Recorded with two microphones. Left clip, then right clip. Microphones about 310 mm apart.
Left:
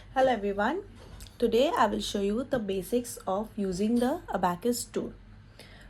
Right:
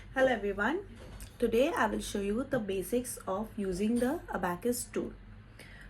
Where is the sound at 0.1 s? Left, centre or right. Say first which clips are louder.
Left 3 dB; left.